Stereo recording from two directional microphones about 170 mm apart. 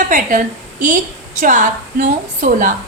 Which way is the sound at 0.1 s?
50° right (ahead or behind).